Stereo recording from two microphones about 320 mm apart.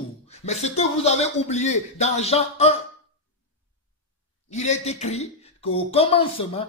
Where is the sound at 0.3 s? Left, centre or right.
Left.